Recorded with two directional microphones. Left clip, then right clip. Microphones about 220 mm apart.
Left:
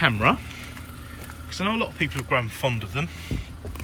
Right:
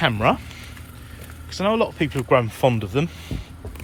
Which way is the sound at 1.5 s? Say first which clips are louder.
Right 6 dB; 10° right (ahead or behind).